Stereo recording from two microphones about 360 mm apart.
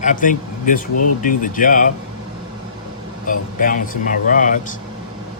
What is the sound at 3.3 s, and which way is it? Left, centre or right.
A man's voice, left.